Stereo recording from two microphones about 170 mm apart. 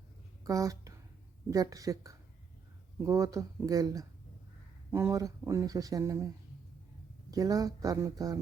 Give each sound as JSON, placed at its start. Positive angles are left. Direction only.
{"t": 0.4, "sound": "a woman's voice", "side_deg": -20}
{"t": 7.3, "sound": "speech", "side_deg": -20}